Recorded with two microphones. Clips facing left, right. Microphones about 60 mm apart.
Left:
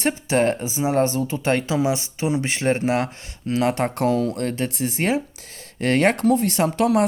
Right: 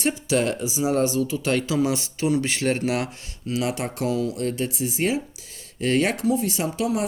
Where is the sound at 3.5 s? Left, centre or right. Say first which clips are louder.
Left 5 dB; left.